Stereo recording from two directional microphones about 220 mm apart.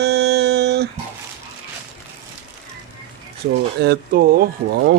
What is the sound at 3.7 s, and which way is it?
Speech, 45° right (ahead or behind).